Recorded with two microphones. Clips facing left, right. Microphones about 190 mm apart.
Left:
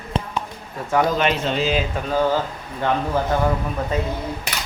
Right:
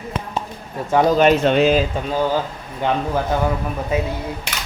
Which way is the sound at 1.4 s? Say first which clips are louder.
Right 7 dB; 60° right (ahead or behind).